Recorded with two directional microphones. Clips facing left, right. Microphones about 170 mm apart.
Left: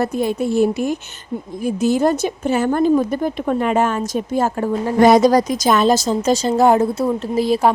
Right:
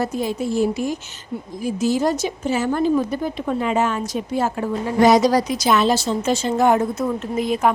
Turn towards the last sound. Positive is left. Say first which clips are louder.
# left 4 dB
turn(degrees=35)  # may be behind; listen again after turning